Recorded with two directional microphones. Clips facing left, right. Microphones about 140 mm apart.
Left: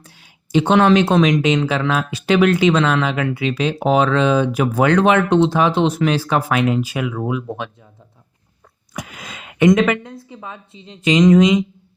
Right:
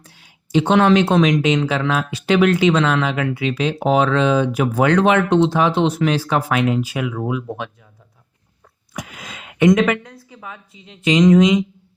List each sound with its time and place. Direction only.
0.5 s speech: 40° left (ahead or behind)
9.0 s a sound: 40° left (ahead or behind)
9.6 s a woman's voice: 30° left (ahead or behind)